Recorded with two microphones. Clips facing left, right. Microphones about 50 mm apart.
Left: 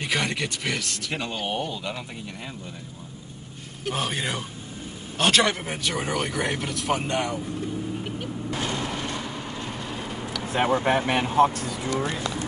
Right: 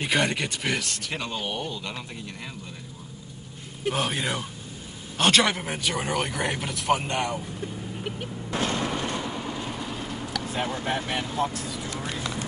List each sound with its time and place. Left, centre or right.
0.0 s speech: centre
1.1 s a man's voice: centre
3.9 s speech: centre
8.7 s artillery fire: right
9.3 s train: centre
9.7 s vehicle: centre
10.5 s speech: left